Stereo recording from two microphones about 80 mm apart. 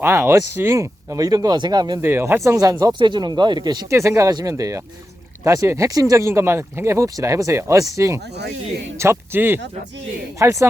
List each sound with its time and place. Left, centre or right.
0.0 s speech: right
0.8 s speech: right
2.0 s speech: right
2.7 s speech: right
3.8 s speech: right
10.3 s speech: right